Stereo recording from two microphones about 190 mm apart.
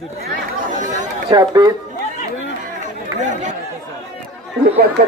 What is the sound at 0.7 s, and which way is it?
Speech, 40° right (ahead or behind).